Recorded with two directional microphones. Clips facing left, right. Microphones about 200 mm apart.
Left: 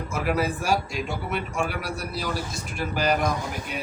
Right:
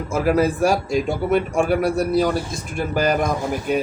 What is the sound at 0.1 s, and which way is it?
Speech, 40° right (ahead or behind).